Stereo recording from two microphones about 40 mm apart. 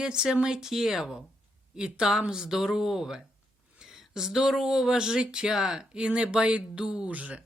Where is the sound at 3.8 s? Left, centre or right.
Centre.